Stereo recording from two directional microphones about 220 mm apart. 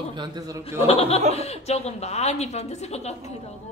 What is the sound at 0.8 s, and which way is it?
A woman's voice, 25° left (ahead or behind).